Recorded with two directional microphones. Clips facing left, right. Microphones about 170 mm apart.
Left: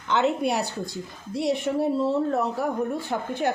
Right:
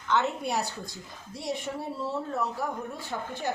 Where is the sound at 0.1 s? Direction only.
80° left.